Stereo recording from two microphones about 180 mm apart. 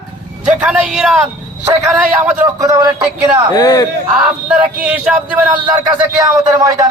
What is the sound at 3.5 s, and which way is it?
Speech, 20° left (ahead or behind).